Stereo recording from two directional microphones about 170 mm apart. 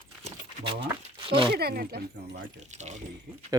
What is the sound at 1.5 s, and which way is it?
Speech, 65° right (ahead or behind).